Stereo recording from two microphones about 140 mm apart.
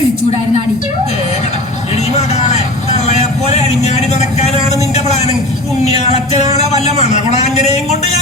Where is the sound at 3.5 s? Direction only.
50° left (ahead or behind).